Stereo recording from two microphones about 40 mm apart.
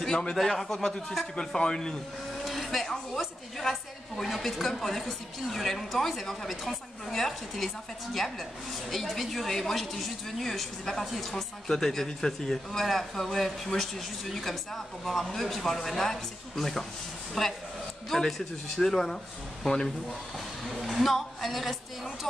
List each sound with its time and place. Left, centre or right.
0.3 s a man's voice: centre
1.4 s a man's voice: centre
2.4 s a sound: centre
4.4 s a woman's voice: centre
20.6 s a woman's voice: centre